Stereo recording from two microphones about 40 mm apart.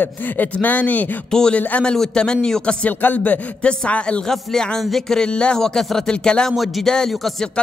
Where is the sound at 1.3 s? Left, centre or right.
Centre.